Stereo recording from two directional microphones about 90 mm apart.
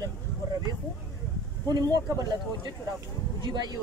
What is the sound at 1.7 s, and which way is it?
Speech, 50° right (ahead or behind).